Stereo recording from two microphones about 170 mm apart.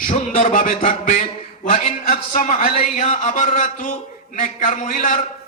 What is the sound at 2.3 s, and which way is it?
A man's voice, 50° left (ahead or behind).